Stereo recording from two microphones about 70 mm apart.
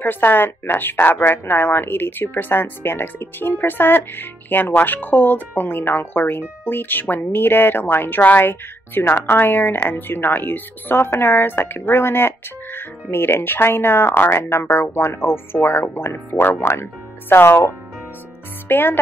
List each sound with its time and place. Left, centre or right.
0.0 s a woman's voice: left
18.7 s a woman's voice: left